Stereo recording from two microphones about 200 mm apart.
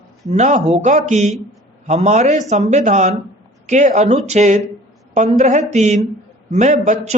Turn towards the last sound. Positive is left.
turn(degrees=-35)  # may be behind; listen again after turning